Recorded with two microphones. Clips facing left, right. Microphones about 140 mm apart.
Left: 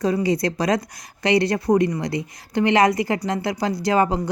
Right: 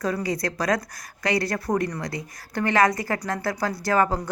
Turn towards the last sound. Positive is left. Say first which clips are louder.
# left 3 dB
turn(degrees=25)  # may be behind; listen again after turning